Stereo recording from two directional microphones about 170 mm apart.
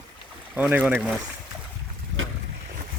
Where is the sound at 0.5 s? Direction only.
10° right (ahead or behind).